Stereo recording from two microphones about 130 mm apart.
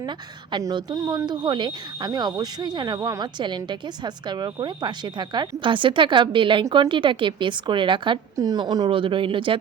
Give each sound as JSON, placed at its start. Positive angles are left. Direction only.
{"t": 0.5, "sound": "speech", "side_deg": -35}